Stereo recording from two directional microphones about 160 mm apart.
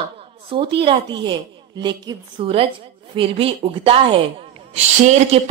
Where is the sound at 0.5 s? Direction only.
35° right (ahead or behind).